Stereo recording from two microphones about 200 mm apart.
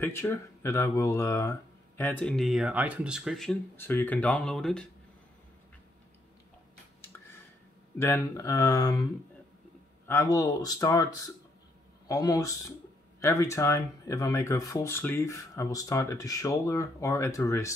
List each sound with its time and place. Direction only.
0.0 s speech: 10° left (ahead or behind)
8.0 s speech: 15° left (ahead or behind)